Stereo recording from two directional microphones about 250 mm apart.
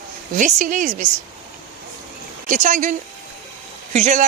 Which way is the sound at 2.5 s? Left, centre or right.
Right.